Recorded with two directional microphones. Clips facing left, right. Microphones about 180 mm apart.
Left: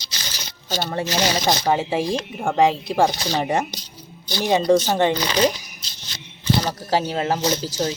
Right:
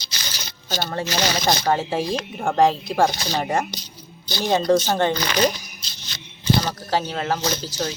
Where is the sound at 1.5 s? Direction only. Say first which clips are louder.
Left 1 dB; 15° left (ahead or behind).